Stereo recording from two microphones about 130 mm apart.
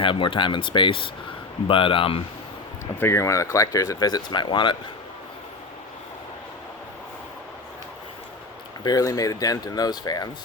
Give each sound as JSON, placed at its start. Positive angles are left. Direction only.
{"t": 0.0, "sound": "speech", "side_deg": 40}
{"t": 3.0, "sound": "speech", "side_deg": 20}
{"t": 8.8, "sound": "speech", "side_deg": 25}